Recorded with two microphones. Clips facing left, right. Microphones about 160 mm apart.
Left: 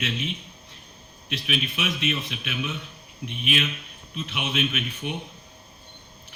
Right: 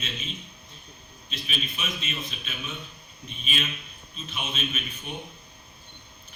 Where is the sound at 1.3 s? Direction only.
75° left (ahead or behind).